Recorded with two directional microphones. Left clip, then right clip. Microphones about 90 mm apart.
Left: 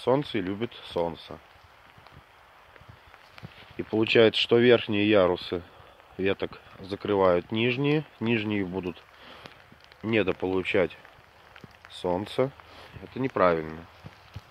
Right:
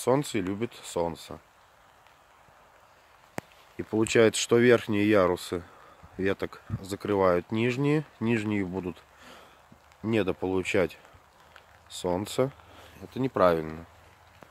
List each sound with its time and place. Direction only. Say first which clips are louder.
0.0 s speech: left 1 dB; 40° right (ahead or behind)
3.9 s speech: left 2 dB; 25° right (ahead or behind)
7.1 s speech: left 2 dB; 20° right (ahead or behind)
10.0 s speech: left 2 dB; 30° right (ahead or behind); by 13.7 s 45° right (ahead or behind)